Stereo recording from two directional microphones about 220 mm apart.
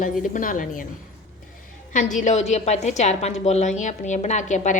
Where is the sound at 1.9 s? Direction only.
35° left (ahead or behind).